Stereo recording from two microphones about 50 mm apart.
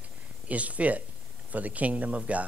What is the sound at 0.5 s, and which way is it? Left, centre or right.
Speech, right.